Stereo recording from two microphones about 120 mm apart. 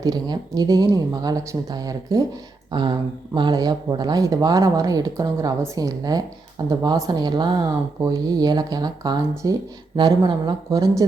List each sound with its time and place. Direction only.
0.0 s speech: 35° right (ahead or behind)